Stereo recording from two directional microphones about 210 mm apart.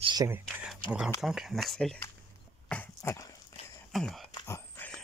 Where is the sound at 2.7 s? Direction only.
10° left (ahead or behind).